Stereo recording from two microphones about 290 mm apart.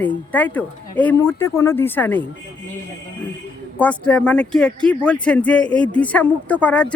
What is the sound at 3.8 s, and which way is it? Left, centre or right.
Speech, centre.